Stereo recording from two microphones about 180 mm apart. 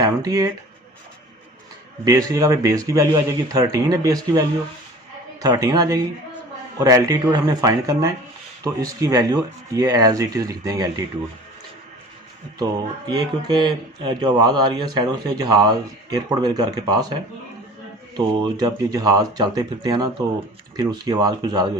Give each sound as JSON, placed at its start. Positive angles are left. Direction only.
{"t": 0.0, "sound": "speech", "side_deg": -20}
{"t": 2.0, "sound": "speech", "side_deg": -20}
{"t": 13.1, "sound": "speech", "side_deg": -25}
{"t": 18.4, "sound": "speech", "side_deg": -20}